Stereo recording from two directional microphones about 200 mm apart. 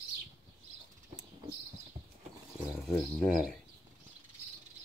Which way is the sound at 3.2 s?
Centre (ahead or behind).